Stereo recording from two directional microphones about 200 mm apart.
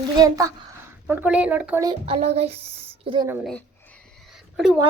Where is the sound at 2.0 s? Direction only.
30° right (ahead or behind).